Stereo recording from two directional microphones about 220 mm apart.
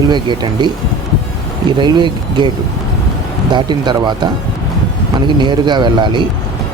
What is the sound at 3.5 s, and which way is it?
Speech, 20° right (ahead or behind).